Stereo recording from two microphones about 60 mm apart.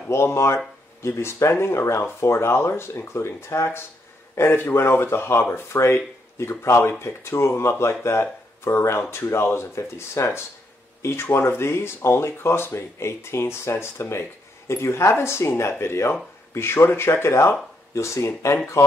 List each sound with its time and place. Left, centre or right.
0.1 s speech: left
4.4 s speech: left